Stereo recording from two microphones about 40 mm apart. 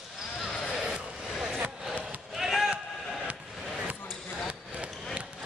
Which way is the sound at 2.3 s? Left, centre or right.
Centre.